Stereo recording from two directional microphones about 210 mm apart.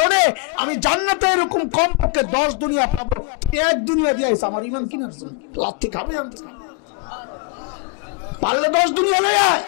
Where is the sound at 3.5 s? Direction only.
15° left (ahead or behind).